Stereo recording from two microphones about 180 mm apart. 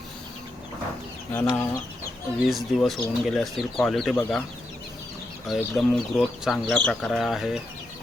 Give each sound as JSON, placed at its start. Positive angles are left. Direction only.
{"t": 1.3, "sound": "speech", "side_deg": 15}
{"t": 2.4, "sound": "speech", "side_deg": 0}
{"t": 5.5, "sound": "speech", "side_deg": 0}